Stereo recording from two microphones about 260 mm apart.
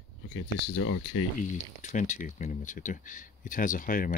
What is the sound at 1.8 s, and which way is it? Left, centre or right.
Speech, left.